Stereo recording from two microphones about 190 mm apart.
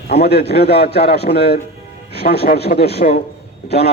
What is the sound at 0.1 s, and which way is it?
A man's voice, 55° left (ahead or behind).